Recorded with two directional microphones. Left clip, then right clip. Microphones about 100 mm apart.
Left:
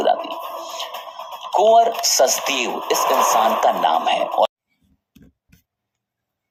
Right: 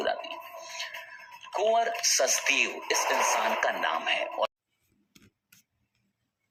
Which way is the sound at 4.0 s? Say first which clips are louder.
Left 11 dB; 45° left (ahead or behind).